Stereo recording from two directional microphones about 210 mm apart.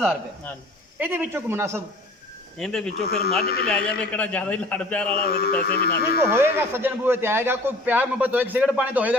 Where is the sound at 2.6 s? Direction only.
5° left (ahead or behind).